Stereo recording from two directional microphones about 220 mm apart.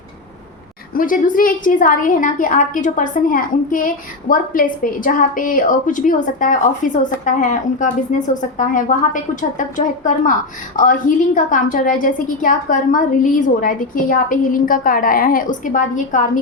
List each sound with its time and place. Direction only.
0.9 s a woman's voice: 40° left (ahead or behind)